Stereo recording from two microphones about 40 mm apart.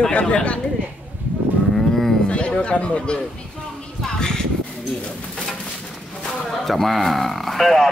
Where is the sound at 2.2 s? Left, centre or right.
Left.